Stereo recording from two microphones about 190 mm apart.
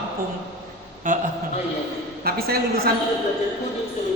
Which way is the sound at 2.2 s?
55° right (ahead or behind).